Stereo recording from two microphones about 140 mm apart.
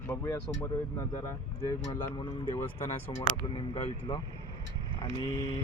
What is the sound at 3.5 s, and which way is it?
Speech, 45° left (ahead or behind).